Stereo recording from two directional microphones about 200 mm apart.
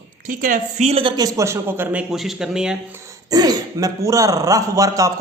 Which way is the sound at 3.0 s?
15° right (ahead or behind).